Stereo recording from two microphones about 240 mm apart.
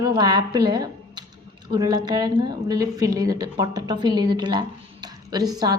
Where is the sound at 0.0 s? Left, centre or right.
Centre.